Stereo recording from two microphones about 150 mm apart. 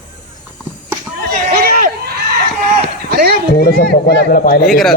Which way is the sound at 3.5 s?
90° left.